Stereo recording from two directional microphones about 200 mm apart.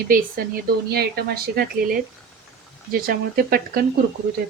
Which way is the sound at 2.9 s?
45° right (ahead or behind).